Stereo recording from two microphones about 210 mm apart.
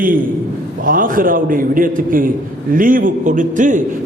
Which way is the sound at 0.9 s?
40° right (ahead or behind).